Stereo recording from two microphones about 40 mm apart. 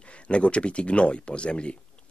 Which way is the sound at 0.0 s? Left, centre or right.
Left.